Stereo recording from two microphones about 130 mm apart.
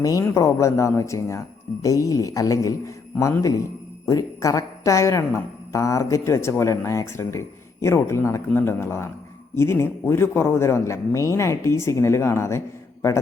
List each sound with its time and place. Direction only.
0.0 s speech: 25° left (ahead or behind)